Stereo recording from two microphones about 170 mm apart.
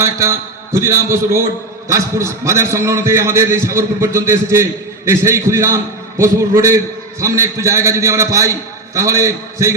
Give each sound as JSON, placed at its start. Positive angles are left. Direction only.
{"t": 0.0, "sound": "a man's voice", "side_deg": -15}